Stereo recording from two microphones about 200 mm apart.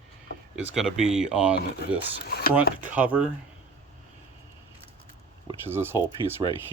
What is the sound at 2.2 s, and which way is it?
Speech, 50° left (ahead or behind).